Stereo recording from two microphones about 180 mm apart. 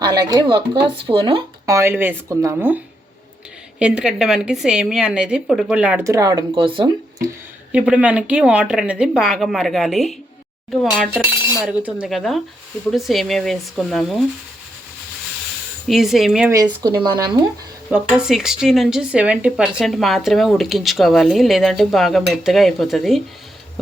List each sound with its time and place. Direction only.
0.0 s speech: 20° right (ahead or behind)
1.6 s speech: 15° right (ahead or behind)
7.7 s speech: 5° right (ahead or behind)
11.1 s chink: 15° right (ahead or behind)
11.6 s speech: 5° right (ahead or behind)
15.9 s speech: centre (ahead or behind)
16.5 s speech: 20° right (ahead or behind)
17.9 s speech: 5° right (ahead or behind)